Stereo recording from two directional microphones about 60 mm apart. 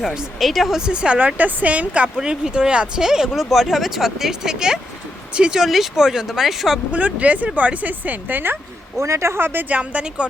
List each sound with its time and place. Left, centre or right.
0.3 s speech: centre
0.8 s speech: centre
6.9 s speech: right
9.0 s speech: right
9.6 s speech: right